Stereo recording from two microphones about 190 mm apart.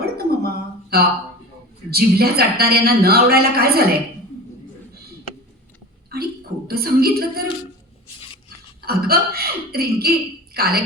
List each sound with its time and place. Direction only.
0.0 s a sound: 55° right (ahead or behind)
1.9 s speech: 55° right (ahead or behind)
6.7 s speech: 55° right (ahead or behind)
8.9 s speech: 55° right (ahead or behind)